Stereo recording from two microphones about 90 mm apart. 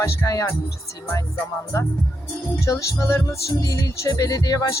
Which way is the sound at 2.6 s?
35° left (ahead or behind).